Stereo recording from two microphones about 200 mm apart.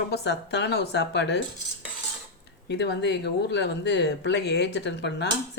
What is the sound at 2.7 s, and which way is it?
Speech, 55° left (ahead or behind).